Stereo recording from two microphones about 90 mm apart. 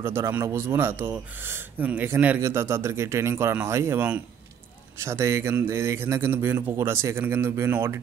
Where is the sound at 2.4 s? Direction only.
30° right (ahead or behind).